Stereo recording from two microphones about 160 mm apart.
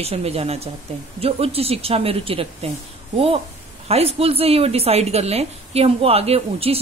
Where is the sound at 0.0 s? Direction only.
40° right (ahead or behind).